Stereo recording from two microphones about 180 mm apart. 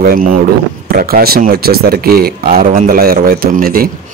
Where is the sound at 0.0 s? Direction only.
55° right (ahead or behind).